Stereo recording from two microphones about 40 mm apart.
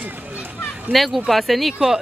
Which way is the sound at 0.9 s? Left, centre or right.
Centre.